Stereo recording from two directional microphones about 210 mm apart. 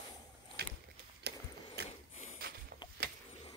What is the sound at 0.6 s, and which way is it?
Vehicle, 50° right (ahead or behind).